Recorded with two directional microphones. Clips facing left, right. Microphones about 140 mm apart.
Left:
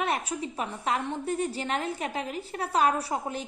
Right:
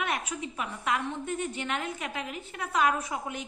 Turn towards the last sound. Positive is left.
turn(degrees=35)  # may be behind; listen again after turning